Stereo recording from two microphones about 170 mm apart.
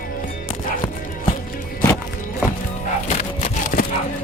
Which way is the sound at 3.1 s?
50° left (ahead or behind).